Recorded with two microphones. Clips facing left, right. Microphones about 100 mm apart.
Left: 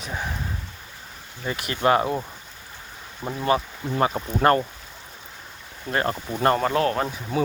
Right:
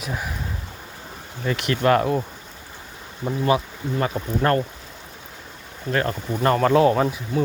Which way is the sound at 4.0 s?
5° left (ahead or behind).